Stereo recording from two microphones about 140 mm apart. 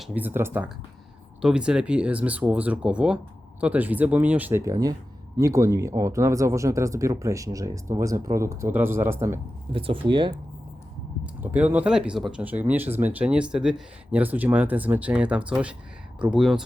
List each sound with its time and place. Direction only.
0.0 s speech: 10° right (ahead or behind)
4.6 s speech: 25° right (ahead or behind)
9.7 s speech: 40° right (ahead or behind)
11.5 s speech: 10° right (ahead or behind)